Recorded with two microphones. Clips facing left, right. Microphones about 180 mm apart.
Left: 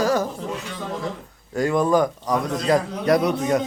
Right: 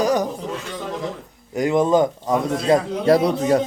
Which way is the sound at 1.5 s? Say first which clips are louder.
Right 2 dB; 20° right (ahead or behind).